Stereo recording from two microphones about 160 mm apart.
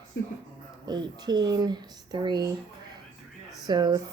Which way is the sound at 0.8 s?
25° right (ahead or behind).